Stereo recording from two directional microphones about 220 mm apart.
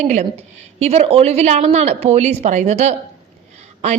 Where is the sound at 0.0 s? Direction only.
30° right (ahead or behind).